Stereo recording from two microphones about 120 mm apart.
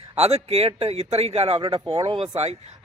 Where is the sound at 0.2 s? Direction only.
60° right (ahead or behind).